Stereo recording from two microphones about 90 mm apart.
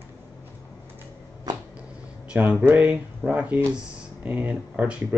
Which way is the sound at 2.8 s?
20° right (ahead or behind).